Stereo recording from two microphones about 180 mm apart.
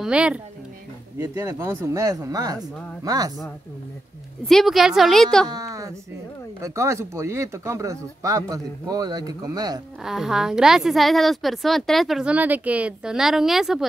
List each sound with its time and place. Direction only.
0.0 s a woman's voice: 5° right (ahead or behind)
1.1 s speech: 15° right (ahead or behind)
4.5 s a woman's voice: centre (ahead or behind)
5.5 s a sound: 20° right (ahead or behind)
6.6 s speech: 15° right (ahead or behind)
10.0 s a woman's voice: 5° right (ahead or behind)